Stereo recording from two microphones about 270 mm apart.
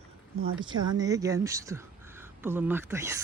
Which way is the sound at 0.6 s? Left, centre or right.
Centre.